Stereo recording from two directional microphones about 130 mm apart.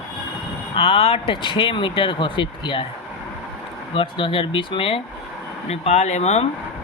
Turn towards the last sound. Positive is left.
turn(degrees=55)  # may be behind; listen again after turning